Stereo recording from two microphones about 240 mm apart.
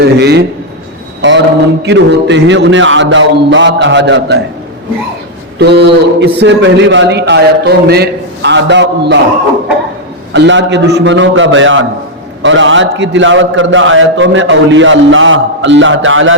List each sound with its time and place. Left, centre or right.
0.0 s a man's voice: right
1.2 s mantra: right
1.8 s a man's voice: right
5.5 s a man's voice: right
10.3 s a man's voice: right